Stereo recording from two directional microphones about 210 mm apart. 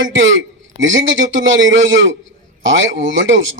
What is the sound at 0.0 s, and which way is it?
A man's voice, 65° right (ahead or behind).